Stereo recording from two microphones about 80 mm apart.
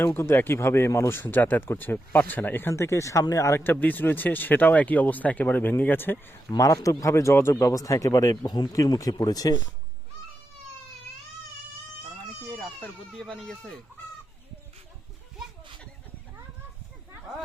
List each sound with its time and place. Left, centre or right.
0.0 s speech: left
3.6 s speech: left
6.6 s speech: left
8.4 s speech: left
12.5 s speech: centre